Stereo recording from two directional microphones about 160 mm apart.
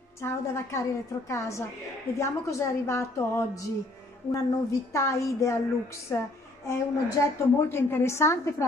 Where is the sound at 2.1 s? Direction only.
20° left (ahead or behind).